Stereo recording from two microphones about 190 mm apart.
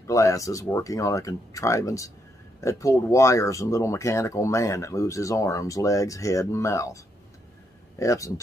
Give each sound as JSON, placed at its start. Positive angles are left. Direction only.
{"t": 0.0, "sound": "speech", "side_deg": 15}
{"t": 8.0, "sound": "speech", "side_deg": 15}